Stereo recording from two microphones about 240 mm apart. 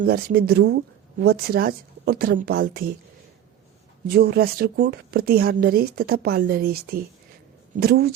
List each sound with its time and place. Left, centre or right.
0.0 s speech: right
4.0 s speech: right